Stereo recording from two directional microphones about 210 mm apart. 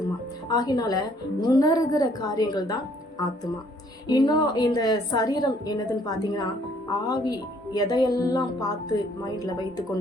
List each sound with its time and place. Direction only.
0.4 s a woman's voice: 20° left (ahead or behind)
4.0 s speech: 20° left (ahead or behind)